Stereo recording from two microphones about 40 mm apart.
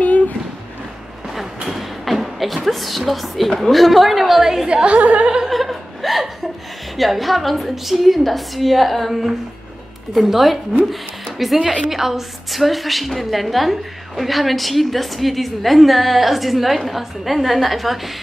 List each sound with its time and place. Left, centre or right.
1.7 s a sound: centre
3.1 s a woman's voice: centre
4.8 s speech: right
5.5 s chuckle: centre
7.0 s a woman's voice: centre